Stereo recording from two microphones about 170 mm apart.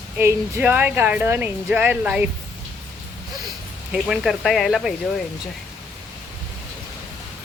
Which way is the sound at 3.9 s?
Centre (ahead or behind).